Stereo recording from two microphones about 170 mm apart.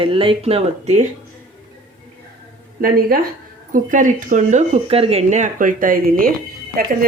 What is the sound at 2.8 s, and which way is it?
Speech, 60° right (ahead or behind).